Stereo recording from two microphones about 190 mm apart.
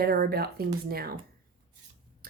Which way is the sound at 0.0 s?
55° right (ahead or behind).